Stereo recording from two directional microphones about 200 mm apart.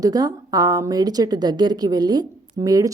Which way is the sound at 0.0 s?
20° right (ahead or behind).